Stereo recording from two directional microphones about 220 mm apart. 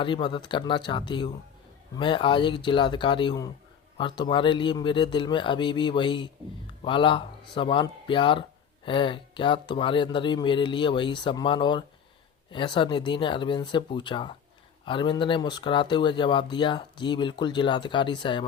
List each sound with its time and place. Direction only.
0.0 s speech: 20° left (ahead or behind)